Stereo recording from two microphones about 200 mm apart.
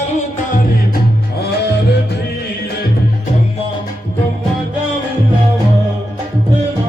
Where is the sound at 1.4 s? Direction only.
55° left (ahead or behind).